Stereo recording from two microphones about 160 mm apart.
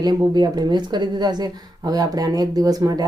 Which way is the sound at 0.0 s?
25° right (ahead or behind).